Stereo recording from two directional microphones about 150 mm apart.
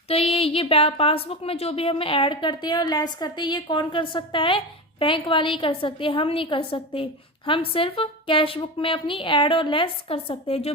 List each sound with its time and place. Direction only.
0.1 s a woman's voice: 40° left (ahead or behind)